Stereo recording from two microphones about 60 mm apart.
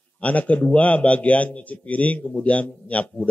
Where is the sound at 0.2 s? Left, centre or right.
Left.